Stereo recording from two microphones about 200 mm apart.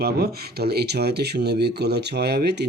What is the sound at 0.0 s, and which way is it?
Speech, 50° right (ahead or behind).